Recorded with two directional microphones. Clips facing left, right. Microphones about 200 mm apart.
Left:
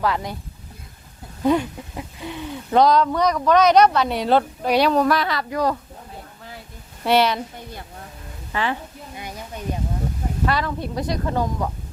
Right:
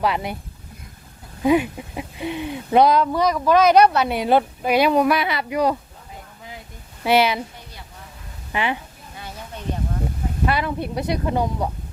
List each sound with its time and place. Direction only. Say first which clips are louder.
0.0 s speech: right 1 dB; 15° right (ahead or behind)
1.4 s speech: right 2 dB; 10° right (ahead or behind)
7.0 s speech: even; 5° right (ahead or behind)
8.5 s speech: right 1 dB; 15° right (ahead or behind)
9.1 s a sound: left 1 dB; 15° left (ahead or behind)
10.4 s speech: right 1 dB; 15° right (ahead or behind)